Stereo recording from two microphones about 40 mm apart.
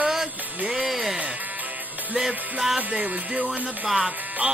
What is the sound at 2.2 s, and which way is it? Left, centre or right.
Music, centre.